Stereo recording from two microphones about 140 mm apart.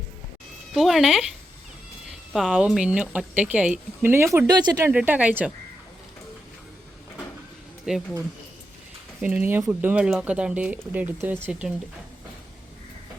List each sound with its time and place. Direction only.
0.8 s speech: centre (ahead or behind)
4.4 s speech: 30° right (ahead or behind)
4.9 s speech: 10° right (ahead or behind)
7.9 s speech: 5° right (ahead or behind)
9.2 s speech: 10° right (ahead or behind)